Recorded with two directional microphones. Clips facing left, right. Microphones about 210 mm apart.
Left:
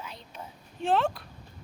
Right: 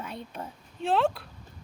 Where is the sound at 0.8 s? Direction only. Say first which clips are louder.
Right 1 dB; centre (ahead or behind).